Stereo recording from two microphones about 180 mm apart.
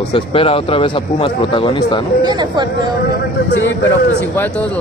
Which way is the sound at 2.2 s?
25° right (ahead or behind).